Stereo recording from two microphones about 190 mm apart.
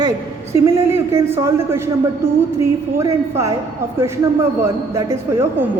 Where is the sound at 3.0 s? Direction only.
15° right (ahead or behind).